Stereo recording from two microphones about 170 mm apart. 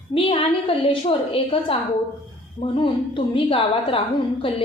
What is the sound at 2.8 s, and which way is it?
A woman's voice, 30° left (ahead or behind).